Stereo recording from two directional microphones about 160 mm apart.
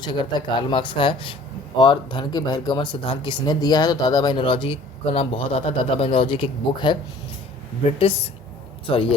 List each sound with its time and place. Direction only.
0.0 s speech: 30° left (ahead or behind)